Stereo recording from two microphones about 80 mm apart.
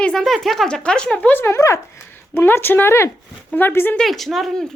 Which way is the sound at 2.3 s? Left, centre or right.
Left.